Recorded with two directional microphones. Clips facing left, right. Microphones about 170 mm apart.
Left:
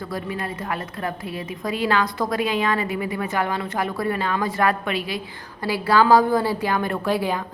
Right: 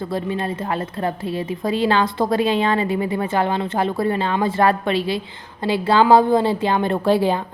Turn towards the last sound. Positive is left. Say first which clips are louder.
# right 5 dB
turn(degrees=-30)  # may be behind; listen again after turning